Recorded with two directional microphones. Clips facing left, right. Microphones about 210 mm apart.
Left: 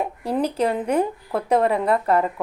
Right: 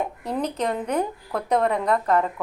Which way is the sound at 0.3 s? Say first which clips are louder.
Left 4 dB; 10° left (ahead or behind).